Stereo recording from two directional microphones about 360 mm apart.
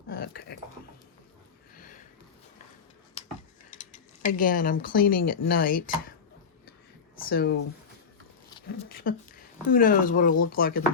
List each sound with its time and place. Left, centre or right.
0.1 s dog: left
1.7 s sniff: left
3.2 s a sound: centre
3.8 s speech: left
7.3 s speech: left
8.4 s a sound: centre
8.9 s speech: left